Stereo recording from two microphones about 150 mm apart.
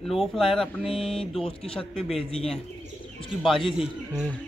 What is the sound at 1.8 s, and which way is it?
Speech, centre (ahead or behind).